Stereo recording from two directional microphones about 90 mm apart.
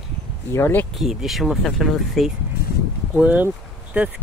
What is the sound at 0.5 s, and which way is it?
Speech, 25° left (ahead or behind).